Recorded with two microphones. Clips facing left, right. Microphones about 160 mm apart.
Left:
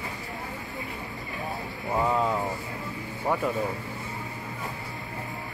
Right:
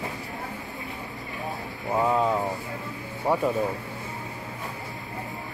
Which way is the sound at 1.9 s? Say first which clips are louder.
Right 2 dB; 10° right (ahead or behind).